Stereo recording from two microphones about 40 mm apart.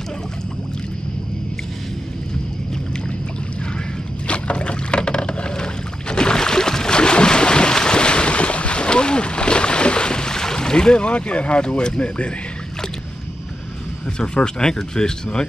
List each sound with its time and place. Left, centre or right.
4.3 s rowboat: left
14.1 s speech: left